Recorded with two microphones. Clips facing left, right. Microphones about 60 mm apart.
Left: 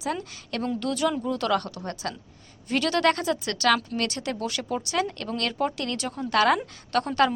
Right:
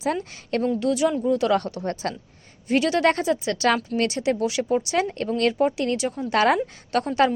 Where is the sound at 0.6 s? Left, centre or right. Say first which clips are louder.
Right 4 dB; centre.